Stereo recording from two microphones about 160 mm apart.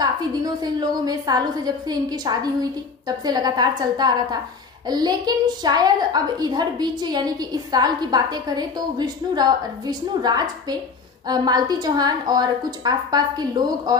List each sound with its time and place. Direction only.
0.0 s a woman's voice: 25° right (ahead or behind)